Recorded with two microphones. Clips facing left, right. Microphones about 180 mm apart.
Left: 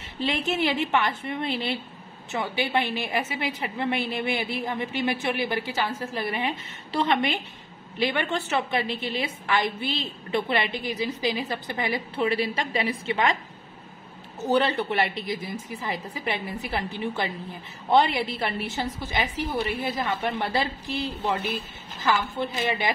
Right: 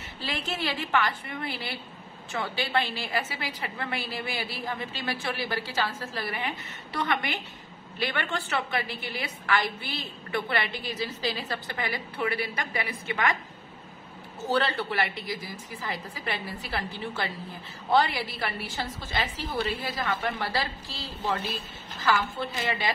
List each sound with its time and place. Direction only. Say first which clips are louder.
0.2 s a woman's voice: left 7 dB; 20° left (ahead or behind)
14.4 s a woman's voice: left 4 dB; 20° left (ahead or behind)